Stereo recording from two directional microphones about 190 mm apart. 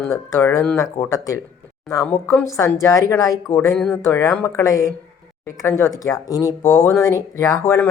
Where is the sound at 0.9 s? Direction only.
15° left (ahead or behind).